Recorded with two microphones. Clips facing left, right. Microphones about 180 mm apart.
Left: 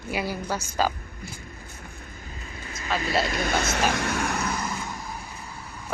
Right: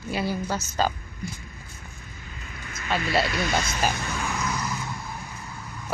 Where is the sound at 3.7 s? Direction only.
80° left; by 4.5 s 60° left (ahead or behind).